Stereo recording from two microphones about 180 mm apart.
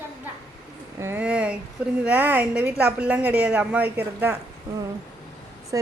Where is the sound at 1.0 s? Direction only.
10° right (ahead or behind).